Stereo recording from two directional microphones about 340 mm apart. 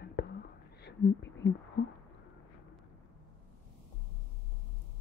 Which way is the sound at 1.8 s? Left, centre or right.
Left.